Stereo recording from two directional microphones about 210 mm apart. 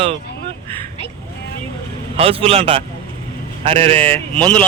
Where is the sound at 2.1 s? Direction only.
25° right (ahead or behind).